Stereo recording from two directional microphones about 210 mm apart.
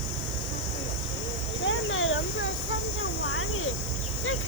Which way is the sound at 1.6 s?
65° left (ahead or behind).